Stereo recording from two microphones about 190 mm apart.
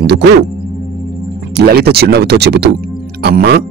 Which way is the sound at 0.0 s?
65° right (ahead or behind).